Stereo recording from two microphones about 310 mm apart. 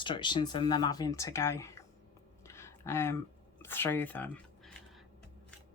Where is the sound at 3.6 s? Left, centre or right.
Centre.